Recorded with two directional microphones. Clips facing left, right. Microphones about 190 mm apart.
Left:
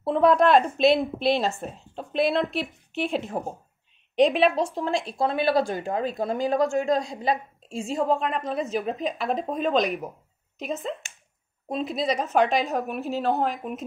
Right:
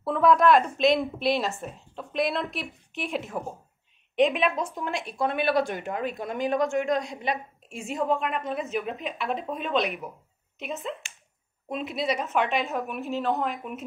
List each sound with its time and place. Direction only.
0.0 s a woman's voice: 25° left (ahead or behind)